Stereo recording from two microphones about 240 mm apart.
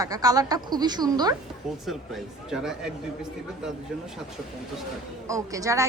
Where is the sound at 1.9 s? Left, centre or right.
Centre.